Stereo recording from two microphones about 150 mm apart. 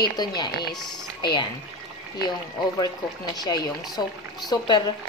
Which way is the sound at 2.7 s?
25° left (ahead or behind).